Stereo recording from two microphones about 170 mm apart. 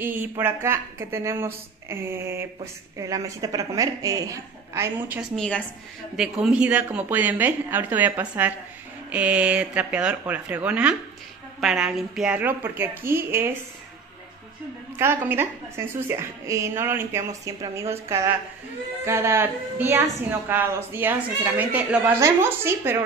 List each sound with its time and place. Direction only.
0.0 s speech: 10° right (ahead or behind)
5.3 s a woman's voice: 5° left (ahead or behind); by 13.5 s 15° right (ahead or behind)
15.2 s speech: 15° right (ahead or behind)